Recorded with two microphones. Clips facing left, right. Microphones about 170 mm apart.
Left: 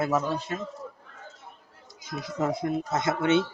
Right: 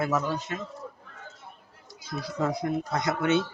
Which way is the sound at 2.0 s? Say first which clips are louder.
Even; 20° left (ahead or behind).